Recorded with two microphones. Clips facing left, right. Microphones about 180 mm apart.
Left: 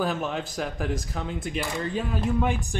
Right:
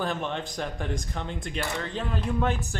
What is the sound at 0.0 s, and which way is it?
Speech, 5° left (ahead or behind).